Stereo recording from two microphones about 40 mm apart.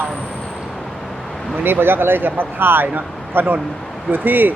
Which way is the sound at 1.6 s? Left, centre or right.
Right.